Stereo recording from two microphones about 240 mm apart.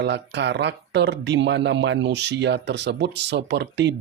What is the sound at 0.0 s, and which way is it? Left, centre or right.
Speech, right.